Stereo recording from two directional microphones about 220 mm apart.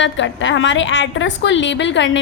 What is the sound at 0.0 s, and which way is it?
A woman's voice, 55° left (ahead or behind).